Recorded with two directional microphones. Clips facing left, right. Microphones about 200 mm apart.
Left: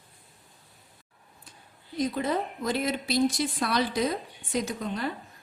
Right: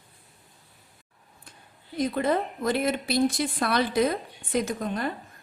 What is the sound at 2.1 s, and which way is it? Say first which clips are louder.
A woman's voice: right 3 dB; 55° right (ahead or behind).